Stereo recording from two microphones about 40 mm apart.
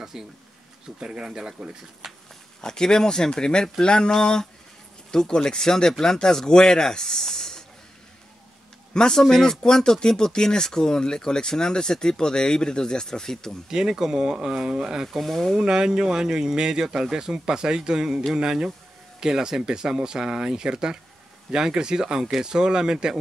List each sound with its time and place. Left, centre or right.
0.0 s a sound: centre
0.9 s speech: centre
2.0 s a sound: centre
2.6 s speech: centre
3.8 s mantra: left
5.1 s speech: centre
8.9 s speech: centre
13.7 s speech: centre
15.1 s speech: centre
15.5 s speech: centre